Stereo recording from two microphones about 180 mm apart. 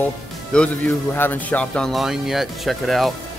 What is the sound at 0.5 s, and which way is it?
Speech, 5° left (ahead or behind).